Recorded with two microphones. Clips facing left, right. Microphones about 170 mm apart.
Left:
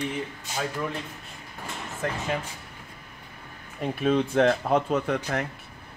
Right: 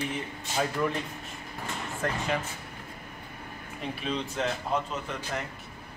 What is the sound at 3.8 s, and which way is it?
Speech, 50° left (ahead or behind).